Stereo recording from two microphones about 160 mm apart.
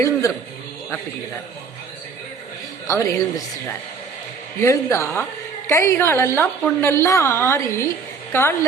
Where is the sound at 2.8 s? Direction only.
20° left (ahead or behind).